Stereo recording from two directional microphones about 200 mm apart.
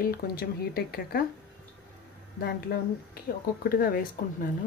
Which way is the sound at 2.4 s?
50° left (ahead or behind).